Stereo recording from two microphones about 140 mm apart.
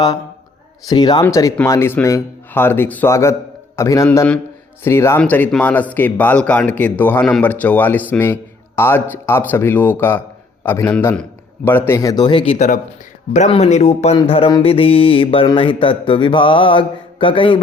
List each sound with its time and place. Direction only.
0.9 s mantra: 30° left (ahead or behind)
1.2 s a man's voice: 20° left (ahead or behind)
12.2 s mantra: 35° left (ahead or behind)
12.5 s speech: 60° left (ahead or behind)
14.2 s mantra: 40° left (ahead or behind)